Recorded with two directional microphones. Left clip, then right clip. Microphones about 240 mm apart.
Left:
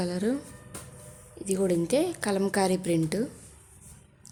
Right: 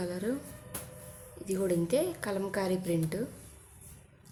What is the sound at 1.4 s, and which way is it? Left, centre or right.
A woman's voice, left.